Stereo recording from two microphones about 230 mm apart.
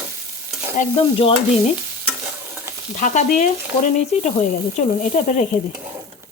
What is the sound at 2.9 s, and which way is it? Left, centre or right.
Sizzle, left.